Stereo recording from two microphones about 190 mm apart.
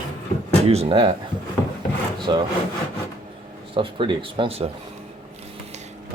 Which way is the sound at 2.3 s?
20° right (ahead or behind).